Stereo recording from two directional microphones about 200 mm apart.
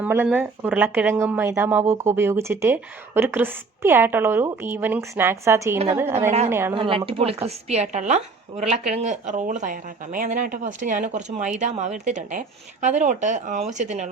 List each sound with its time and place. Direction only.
0.0 s speech: 10° right (ahead or behind)
6.7 s speech: 25° right (ahead or behind)